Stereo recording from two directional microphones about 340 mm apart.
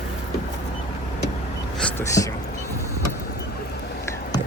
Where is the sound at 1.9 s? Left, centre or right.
Centre.